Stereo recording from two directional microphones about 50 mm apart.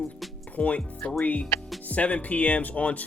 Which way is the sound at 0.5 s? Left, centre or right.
Left.